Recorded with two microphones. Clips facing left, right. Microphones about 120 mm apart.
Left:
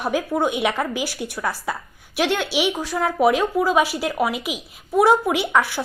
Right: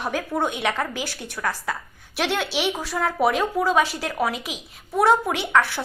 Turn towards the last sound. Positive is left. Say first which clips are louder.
# left 1 dB
turn(degrees=5)  # may be behind; listen again after turning